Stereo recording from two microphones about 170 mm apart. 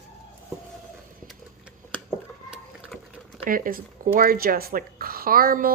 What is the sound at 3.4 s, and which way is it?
Speech, 55° right (ahead or behind).